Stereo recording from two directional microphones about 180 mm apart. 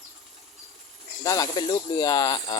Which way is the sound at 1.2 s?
20° left (ahead or behind).